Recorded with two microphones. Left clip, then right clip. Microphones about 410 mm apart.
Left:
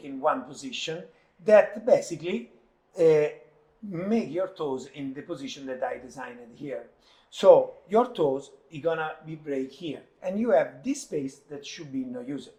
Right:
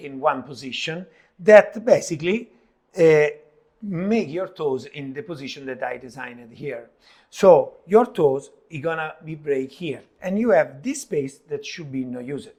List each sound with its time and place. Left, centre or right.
0.2 s speech: right
7.3 s speech: right